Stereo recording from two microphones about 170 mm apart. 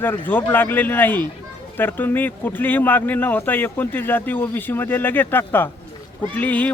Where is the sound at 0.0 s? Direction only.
10° left (ahead or behind).